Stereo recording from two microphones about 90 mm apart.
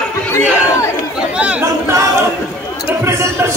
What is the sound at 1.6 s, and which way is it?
Speech, 30° right (ahead or behind).